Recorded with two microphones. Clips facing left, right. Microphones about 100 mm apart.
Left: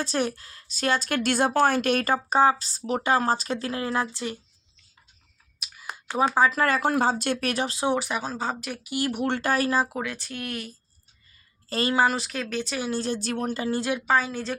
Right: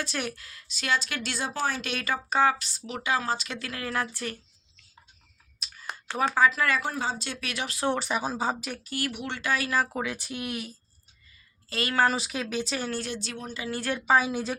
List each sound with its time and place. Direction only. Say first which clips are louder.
0.0 s a woman's voice: left 6 dB; 35° left (ahead or behind); by 4.4 s 20° left (ahead or behind)
5.5 s clicking: left 1 dB; 5° left (ahead or behind)
6.5 s speech: left 4 dB; 45° left (ahead or behind)
6.9 s speech: left 8 dB; 55° left (ahead or behind)
7.5 s a woman's voice: left 6 dB; 35° left (ahead or behind)
7.9 s speech: left 1 dB; centre (ahead or behind)
8.8 s speech: left 4 dB; 15° left (ahead or behind)
9.1 s speech: left 7 dB; 45° left (ahead or behind)
9.9 s speech: even; 5° right (ahead or behind)
11.7 s a woman's voice: left 5 dB; 30° left (ahead or behind)
12.0 s speech: left 1 dB; centre (ahead or behind)
13.1 s speech: left 8 dB; 50° left (ahead or behind)
13.7 s speech: left 2 dB; 25° left (ahead or behind)
14.1 s speech: right 2 dB; 10° right (ahead or behind)